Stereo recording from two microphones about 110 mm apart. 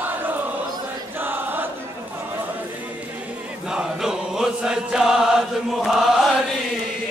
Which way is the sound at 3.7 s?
5° right (ahead or behind).